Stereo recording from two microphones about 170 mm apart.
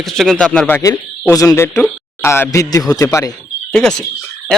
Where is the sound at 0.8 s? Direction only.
20° left (ahead or behind).